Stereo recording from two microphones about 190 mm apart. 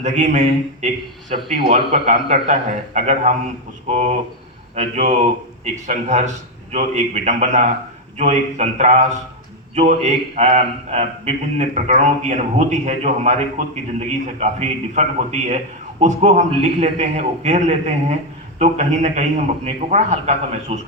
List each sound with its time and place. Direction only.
0.0 s a man's voice: 40° right (ahead or behind)